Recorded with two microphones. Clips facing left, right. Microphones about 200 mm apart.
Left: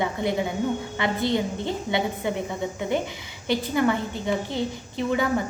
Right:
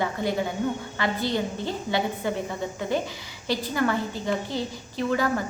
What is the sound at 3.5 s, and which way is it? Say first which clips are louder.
A woman's voice: left 3 dB; 20° left (ahead or behind).